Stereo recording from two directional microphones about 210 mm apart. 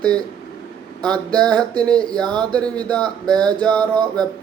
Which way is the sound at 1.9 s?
20° right (ahead or behind).